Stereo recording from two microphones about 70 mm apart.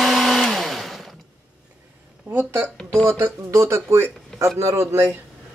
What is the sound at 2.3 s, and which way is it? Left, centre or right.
Speech, right.